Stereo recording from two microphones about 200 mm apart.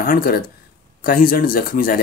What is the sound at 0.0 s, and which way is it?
Speech, 45° left (ahead or behind).